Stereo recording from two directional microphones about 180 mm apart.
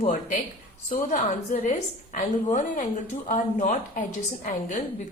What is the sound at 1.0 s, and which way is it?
A woman's voice, 45° left (ahead or behind).